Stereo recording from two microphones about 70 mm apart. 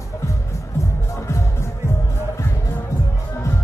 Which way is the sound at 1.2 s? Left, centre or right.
Left.